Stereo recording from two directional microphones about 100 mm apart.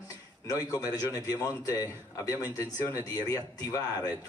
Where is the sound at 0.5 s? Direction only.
40° left (ahead or behind).